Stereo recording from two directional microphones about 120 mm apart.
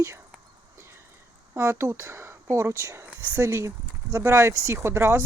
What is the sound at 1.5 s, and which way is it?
Speech, 20° right (ahead or behind).